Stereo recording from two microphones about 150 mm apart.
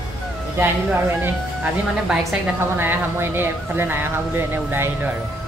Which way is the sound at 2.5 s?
15° right (ahead or behind).